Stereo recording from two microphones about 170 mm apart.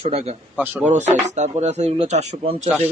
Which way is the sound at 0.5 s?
10° right (ahead or behind).